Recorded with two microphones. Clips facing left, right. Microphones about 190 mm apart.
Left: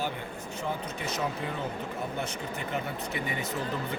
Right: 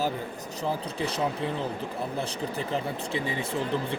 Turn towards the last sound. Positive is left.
turn(degrees=-30)  # may be behind; listen again after turning